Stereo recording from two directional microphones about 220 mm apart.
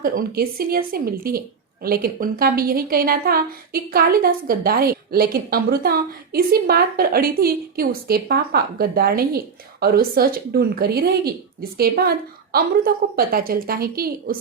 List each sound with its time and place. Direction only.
0.0 s a woman's voice: 40° right (ahead or behind)